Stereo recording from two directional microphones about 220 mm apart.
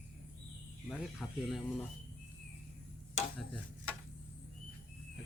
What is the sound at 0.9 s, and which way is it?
Speech, centre (ahead or behind).